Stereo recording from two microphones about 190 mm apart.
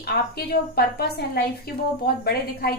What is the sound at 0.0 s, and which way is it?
A woman's voice, 55° left (ahead or behind).